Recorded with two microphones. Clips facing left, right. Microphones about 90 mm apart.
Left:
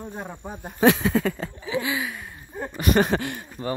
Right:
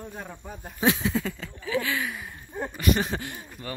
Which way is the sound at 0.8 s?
55° left (ahead or behind).